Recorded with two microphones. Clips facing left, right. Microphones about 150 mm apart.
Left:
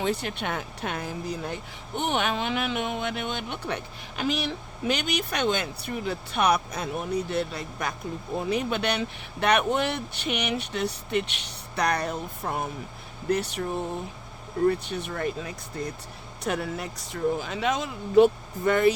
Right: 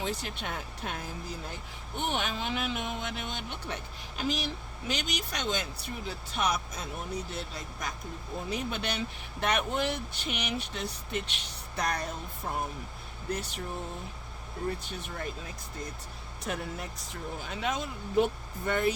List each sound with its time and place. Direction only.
0.0 s speech: 65° left (ahead or behind)
14.7 s speech: 70° left (ahead or behind); by 18.9 s 90° left